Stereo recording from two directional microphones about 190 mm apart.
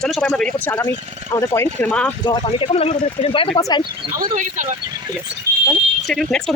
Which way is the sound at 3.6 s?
20° left (ahead or behind).